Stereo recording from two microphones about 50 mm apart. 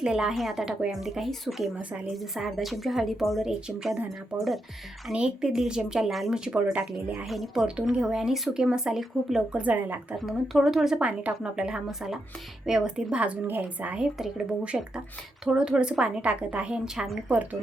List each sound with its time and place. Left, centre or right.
0.0 s speech: centre
0.3 s a woman's voice: centre
5.1 s speech: centre
6.1 s a woman's voice: centre
7.6 s speech: centre
8.0 s speech: centre
9.5 s speech: right
9.7 s speech: right
10.2 s a woman's voice: centre
11.0 s speech: right
11.4 s speech: centre
13.5 s speech: right
14.0 s speech: centre
17.2 s speech: right